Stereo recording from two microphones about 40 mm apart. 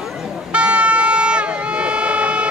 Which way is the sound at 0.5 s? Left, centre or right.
Right.